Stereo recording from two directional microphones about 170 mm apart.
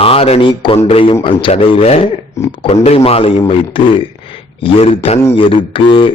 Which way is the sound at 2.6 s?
35° left (ahead or behind).